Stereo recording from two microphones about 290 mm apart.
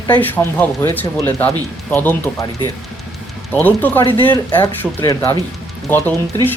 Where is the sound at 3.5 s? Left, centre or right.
Centre.